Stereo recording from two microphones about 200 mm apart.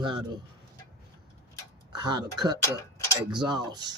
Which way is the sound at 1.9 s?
20° right (ahead or behind).